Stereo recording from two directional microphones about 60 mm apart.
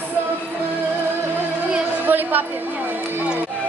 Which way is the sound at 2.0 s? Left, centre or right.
Right.